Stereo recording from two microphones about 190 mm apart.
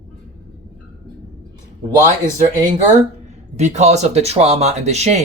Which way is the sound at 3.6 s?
35° right (ahead or behind).